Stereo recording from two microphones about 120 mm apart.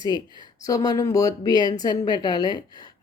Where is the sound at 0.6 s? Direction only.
30° left (ahead or behind).